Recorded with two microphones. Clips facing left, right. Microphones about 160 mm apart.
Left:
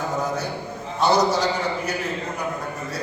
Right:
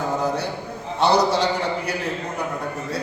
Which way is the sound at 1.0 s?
30° right (ahead or behind).